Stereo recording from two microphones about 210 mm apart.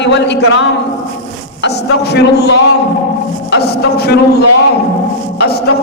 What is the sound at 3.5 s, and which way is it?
Speech, 50° left (ahead or behind).